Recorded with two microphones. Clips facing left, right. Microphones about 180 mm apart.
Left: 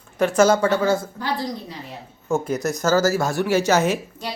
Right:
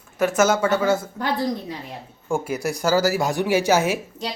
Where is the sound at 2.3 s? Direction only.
10° right (ahead or behind).